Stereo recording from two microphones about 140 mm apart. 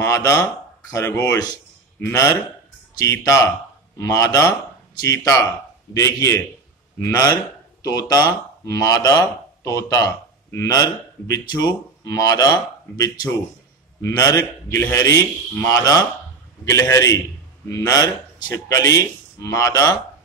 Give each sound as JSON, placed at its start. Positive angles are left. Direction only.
{"t": 0.0, "sound": "speech", "side_deg": 20}
{"t": 1.2, "sound": "a sound", "side_deg": 25}
{"t": 2.0, "sound": "speech", "side_deg": 20}
{"t": 7.8, "sound": "speech", "side_deg": 25}